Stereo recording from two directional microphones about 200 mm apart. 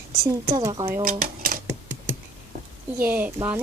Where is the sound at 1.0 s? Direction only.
45° right (ahead or behind).